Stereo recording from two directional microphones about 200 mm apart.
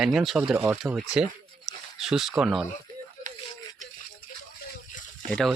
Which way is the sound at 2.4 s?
5° right (ahead or behind).